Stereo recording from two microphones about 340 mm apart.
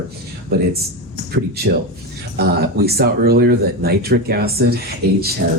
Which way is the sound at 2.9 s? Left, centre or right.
Right.